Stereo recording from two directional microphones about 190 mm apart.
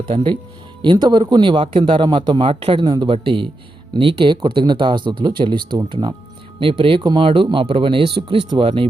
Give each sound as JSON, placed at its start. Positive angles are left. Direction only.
{"t": 0.0, "sound": "a man's voice", "side_deg": -30}